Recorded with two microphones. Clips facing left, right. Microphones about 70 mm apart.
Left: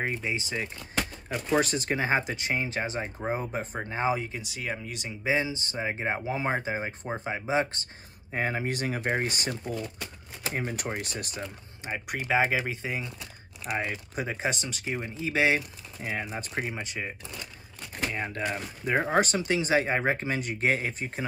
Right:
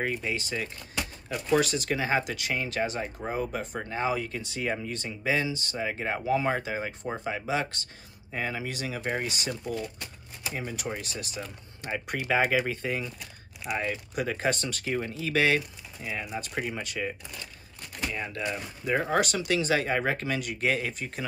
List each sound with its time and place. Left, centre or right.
0.0 s speech: centre
1.6 s speech: left
4.4 s speech: centre; by 9.5 s left
10.5 s speech: left
11.8 s speech: centre
16.0 s speech: left
16.5 s speech: left
18.1 s speech: left